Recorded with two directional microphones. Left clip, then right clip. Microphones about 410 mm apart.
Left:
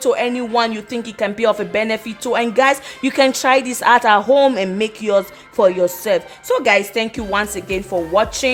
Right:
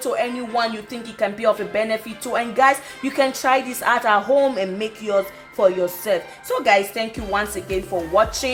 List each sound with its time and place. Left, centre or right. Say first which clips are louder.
0.0 s speech: left 5 dB; left